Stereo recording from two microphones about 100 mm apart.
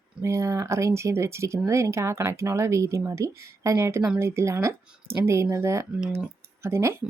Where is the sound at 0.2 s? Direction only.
30° right (ahead or behind).